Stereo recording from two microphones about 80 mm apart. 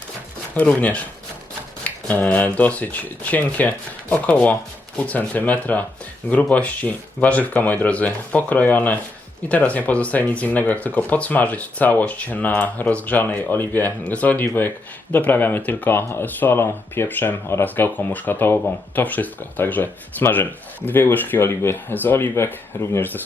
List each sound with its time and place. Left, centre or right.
0.5 s speech: centre
1.8 s a sound: left
2.2 s speech: centre